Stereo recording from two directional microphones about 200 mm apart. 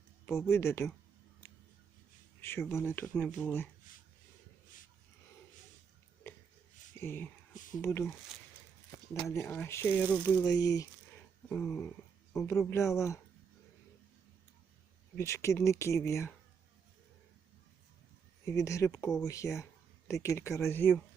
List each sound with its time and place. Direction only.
0.3 s speech: 15° left (ahead or behind)
2.4 s speech: 10° left (ahead or behind)
6.3 s a sound: 15° left (ahead or behind)
7.0 s speech: 10° left (ahead or behind)
7.5 s speech: 40° left (ahead or behind)
7.8 s speech: 15° left (ahead or behind)
15.2 s speech: 15° left (ahead or behind)
18.4 s speech: 15° left (ahead or behind)